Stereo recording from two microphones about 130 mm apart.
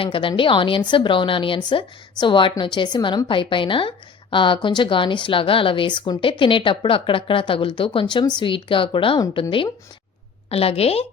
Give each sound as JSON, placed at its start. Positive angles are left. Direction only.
{"t": 0.0, "sound": "a woman's voice", "side_deg": 40}